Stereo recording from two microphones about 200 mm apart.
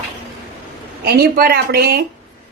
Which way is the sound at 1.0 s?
50° right (ahead or behind).